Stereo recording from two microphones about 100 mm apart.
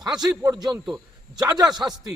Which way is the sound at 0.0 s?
45° right (ahead or behind).